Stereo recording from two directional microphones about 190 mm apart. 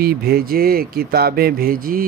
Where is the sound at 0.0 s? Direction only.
55° right (ahead or behind).